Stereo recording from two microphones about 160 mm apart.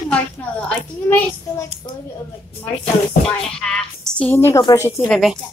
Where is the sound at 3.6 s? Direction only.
5° left (ahead or behind); by 5.1 s 20° left (ahead or behind).